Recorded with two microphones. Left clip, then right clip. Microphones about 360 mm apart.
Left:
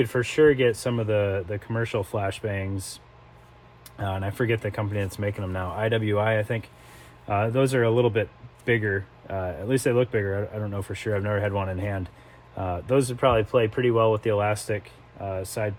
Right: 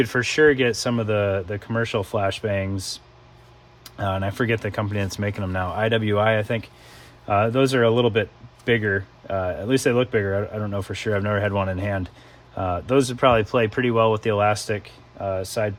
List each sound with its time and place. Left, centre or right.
0.0 s speech: right